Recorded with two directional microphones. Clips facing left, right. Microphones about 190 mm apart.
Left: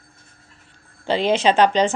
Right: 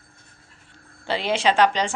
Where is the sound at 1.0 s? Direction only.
20° left (ahead or behind).